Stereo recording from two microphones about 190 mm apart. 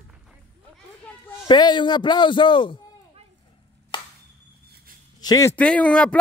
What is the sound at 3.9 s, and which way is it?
Chop, 25° left (ahead or behind).